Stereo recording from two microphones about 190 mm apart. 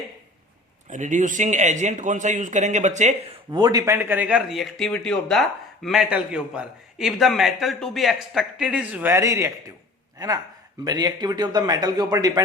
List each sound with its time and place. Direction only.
0.9 s speech: 40° right (ahead or behind)
3.5 s a man's voice: 20° right (ahead or behind)